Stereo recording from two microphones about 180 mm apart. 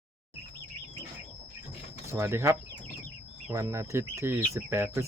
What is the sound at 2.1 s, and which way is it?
Speech, 15° right (ahead or behind).